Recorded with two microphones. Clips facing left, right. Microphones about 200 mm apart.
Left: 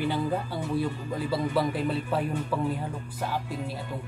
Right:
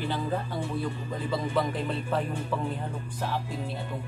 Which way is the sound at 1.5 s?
5° left (ahead or behind).